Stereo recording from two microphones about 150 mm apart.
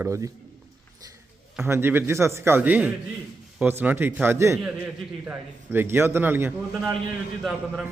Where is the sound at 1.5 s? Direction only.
15° right (ahead or behind).